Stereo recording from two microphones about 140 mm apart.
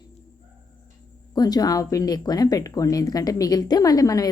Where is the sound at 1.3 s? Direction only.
30° left (ahead or behind).